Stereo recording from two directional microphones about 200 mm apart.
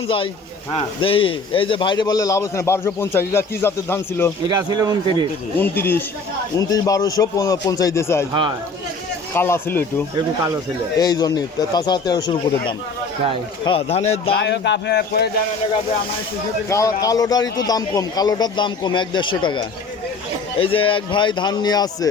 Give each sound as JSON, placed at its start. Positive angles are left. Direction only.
{"t": 1.0, "sound": "a man's voice", "side_deg": 25}
{"t": 4.4, "sound": "speech", "side_deg": -20}
{"t": 5.5, "sound": "a man's voice", "side_deg": 10}
{"t": 8.3, "sound": "speech", "side_deg": -25}
{"t": 9.3, "sound": "a man's voice", "side_deg": 10}
{"t": 10.9, "sound": "a man's voice", "side_deg": 20}
{"t": 14.3, "sound": "speech", "side_deg": 60}
{"t": 16.6, "sound": "a man's voice", "side_deg": 15}